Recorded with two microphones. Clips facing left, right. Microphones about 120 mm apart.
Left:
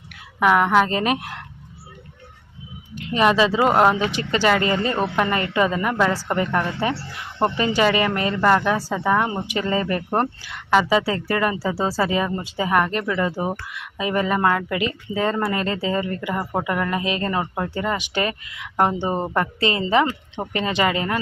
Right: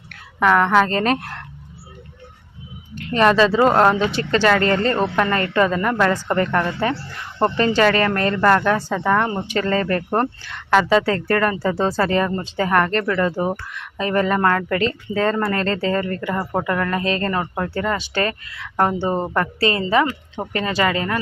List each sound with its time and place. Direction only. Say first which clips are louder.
0.3 s a woman's voice: right 1 dB; 15° left (ahead or behind)
3.0 s a woman's voice: right 2 dB; 15° left (ahead or behind)